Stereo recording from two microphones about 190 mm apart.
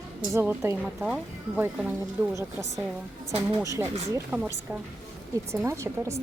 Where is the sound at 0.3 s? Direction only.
15° right (ahead or behind).